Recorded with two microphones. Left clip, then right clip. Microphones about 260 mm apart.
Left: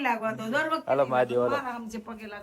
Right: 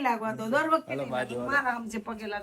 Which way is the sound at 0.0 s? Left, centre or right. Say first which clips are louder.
Left 1 dB; centre.